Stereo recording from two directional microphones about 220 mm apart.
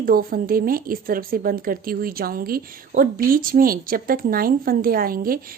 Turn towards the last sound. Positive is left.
turn(degrees=-40)  # may be behind; listen again after turning